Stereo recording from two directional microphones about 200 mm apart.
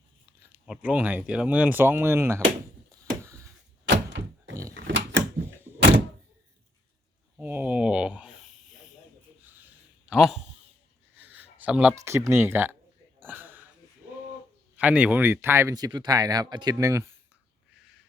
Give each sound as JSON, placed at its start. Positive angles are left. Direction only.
{"t": 0.5, "sound": "speech", "side_deg": -5}
{"t": 2.9, "sound": "a sound", "side_deg": -15}
{"t": 3.8, "sound": "door", "side_deg": -60}
{"t": 4.9, "sound": "drawer open or close", "side_deg": -65}
{"t": 7.3, "sound": "snake", "side_deg": -10}
{"t": 10.1, "sound": "speech", "side_deg": 0}
{"t": 11.2, "sound": "a sound", "side_deg": -10}
{"t": 11.9, "sound": "speech", "side_deg": -15}
{"t": 13.1, "sound": "a sound", "side_deg": -10}
{"t": 14.8, "sound": "speech", "side_deg": -5}